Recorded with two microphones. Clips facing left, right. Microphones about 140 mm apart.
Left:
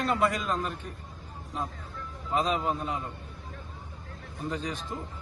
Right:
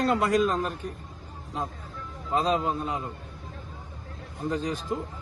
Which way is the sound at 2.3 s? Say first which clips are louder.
Right 3 dB; 35° right (ahead or behind).